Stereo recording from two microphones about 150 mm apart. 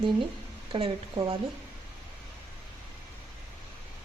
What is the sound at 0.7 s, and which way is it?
Speech, 35° right (ahead or behind).